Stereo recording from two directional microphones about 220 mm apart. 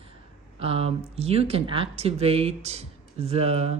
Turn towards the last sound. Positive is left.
turn(degrees=-30)  # may be behind; listen again after turning